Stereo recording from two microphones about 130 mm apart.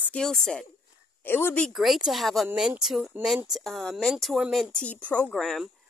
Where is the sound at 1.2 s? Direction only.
15° left (ahead or behind).